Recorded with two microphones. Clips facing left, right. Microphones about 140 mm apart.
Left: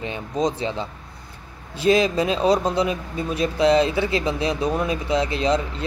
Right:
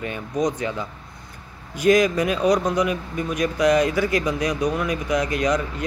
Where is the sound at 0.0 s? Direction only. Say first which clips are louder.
Even; 25° left (ahead or behind).